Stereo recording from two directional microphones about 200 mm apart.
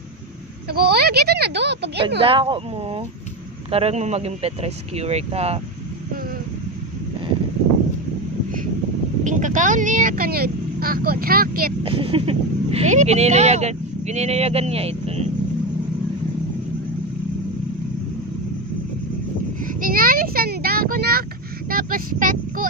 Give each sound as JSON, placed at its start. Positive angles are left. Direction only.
{"t": 0.7, "sound": "speech", "side_deg": -50}
{"t": 2.0, "sound": "speech", "side_deg": -30}
{"t": 9.2, "sound": "speech", "side_deg": -40}
{"t": 11.8, "sound": "speech", "side_deg": -25}
{"t": 19.6, "sound": "a sound", "side_deg": -45}